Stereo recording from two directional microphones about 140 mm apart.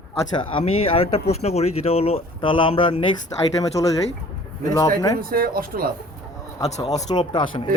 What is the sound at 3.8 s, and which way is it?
Speech, 25° left (ahead or behind).